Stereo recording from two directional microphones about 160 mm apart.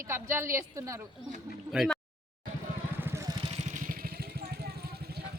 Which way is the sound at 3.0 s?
15° right (ahead or behind).